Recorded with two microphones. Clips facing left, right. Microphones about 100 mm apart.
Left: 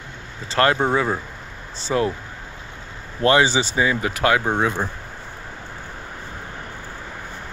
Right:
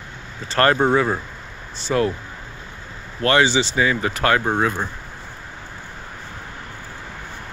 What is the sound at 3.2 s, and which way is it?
Speech, 20° left (ahead or behind).